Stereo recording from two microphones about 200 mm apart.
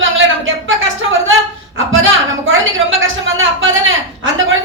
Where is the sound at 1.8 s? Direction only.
75° right (ahead or behind).